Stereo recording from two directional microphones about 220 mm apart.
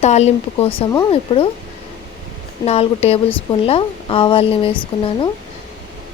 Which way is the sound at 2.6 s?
30° left (ahead or behind).